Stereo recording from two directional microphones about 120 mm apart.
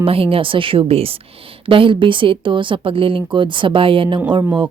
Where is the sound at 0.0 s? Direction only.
50° right (ahead or behind).